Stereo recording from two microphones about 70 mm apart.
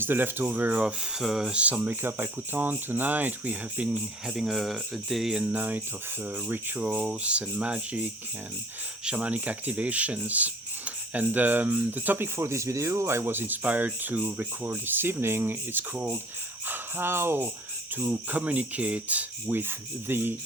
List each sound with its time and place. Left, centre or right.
0.0 s speech: right
1.2 s speech: centre
4.4 s speech: centre; by 17.5 s right
17.9 s speech: right